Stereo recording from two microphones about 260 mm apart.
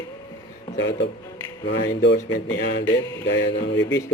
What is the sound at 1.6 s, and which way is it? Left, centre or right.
Speech, left.